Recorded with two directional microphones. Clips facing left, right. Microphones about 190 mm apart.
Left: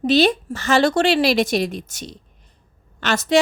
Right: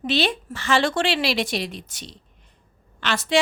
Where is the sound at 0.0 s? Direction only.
40° left (ahead or behind).